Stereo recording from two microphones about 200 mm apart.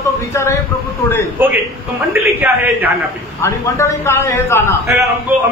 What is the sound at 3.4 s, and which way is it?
A man's voice, 15° left (ahead or behind).